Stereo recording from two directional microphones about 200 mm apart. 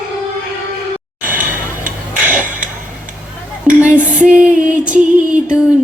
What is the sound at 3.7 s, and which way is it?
Dishes, 5° right (ahead or behind).